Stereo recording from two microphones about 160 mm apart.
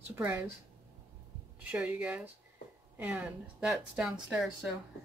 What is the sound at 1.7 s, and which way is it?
Speech, 5° right (ahead or behind).